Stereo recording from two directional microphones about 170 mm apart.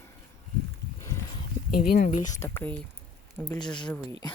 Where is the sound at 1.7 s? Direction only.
60° left (ahead or behind).